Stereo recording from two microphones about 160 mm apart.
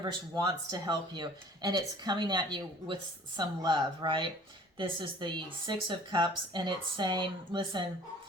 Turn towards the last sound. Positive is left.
turn(degrees=-30)  # may be behind; listen again after turning